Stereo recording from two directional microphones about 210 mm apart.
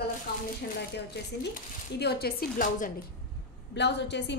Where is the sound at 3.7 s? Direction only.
55° left (ahead or behind).